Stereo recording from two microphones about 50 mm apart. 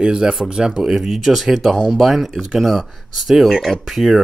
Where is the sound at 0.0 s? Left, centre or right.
Centre.